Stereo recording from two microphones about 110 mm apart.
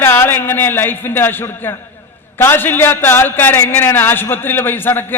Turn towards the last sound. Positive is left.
turn(degrees=20)  # may be behind; listen again after turning